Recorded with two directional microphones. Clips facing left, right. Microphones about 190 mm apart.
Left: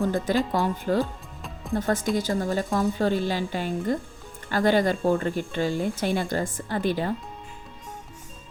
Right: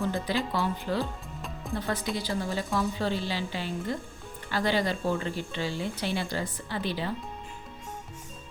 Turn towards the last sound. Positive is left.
turn(degrees=50)  # may be behind; listen again after turning